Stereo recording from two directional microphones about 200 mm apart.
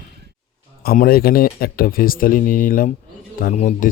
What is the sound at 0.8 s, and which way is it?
Speech, 50° left (ahead or behind).